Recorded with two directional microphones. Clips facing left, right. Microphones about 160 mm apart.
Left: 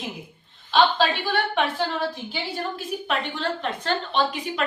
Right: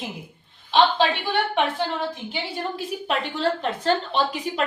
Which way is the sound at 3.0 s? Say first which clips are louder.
Right 4 dB; 30° right (ahead or behind).